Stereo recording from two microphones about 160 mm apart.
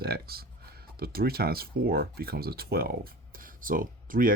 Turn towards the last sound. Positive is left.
turn(degrees=-60)  # may be behind; listen again after turning